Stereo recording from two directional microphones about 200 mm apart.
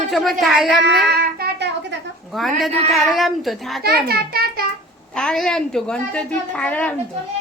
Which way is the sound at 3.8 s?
50° right (ahead or behind).